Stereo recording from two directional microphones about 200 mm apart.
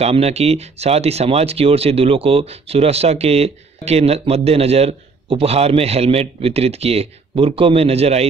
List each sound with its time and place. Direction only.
0.0 s speech: 30° right (ahead or behind)